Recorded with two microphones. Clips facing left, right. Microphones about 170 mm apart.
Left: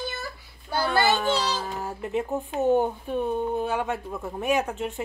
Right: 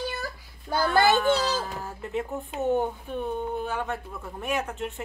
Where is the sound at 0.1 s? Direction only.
40° right (ahead or behind).